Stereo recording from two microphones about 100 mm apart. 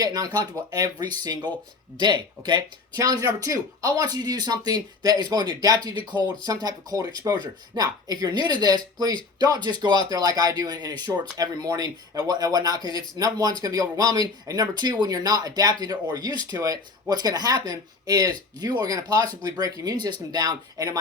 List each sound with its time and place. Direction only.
0.0 s speech: 40° right (ahead or behind)